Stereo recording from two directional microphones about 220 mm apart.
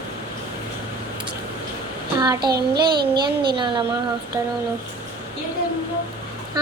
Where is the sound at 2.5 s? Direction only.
45° right (ahead or behind).